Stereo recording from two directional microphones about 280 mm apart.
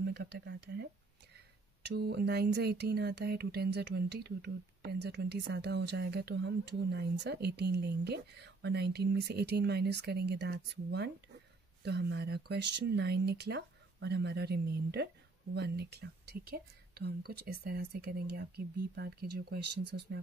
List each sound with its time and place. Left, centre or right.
0.0 s speech: right
1.8 s speech: right